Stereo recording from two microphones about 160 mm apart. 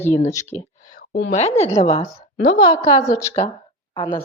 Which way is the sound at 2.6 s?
25° left (ahead or behind).